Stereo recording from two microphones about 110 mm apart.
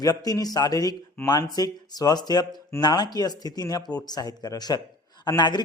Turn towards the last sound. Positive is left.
turn(degrees=40)  # may be behind; listen again after turning